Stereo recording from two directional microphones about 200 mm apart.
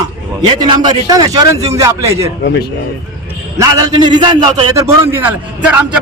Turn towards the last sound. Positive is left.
turn(degrees=-5)  # may be behind; listen again after turning